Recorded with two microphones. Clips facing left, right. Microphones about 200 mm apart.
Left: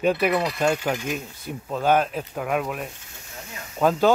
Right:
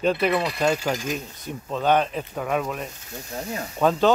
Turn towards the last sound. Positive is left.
turn(degrees=5)  # may be behind; listen again after turning